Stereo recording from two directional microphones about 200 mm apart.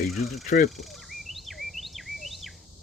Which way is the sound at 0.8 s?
Centre (ahead or behind).